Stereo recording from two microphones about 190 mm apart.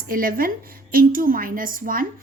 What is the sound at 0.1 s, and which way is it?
A woman's voice, 50° right (ahead or behind).